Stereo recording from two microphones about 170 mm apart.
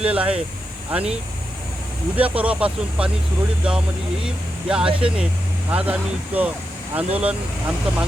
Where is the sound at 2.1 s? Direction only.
10° right (ahead or behind).